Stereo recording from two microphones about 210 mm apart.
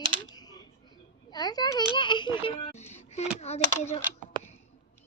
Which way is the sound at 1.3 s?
20° left (ahead or behind).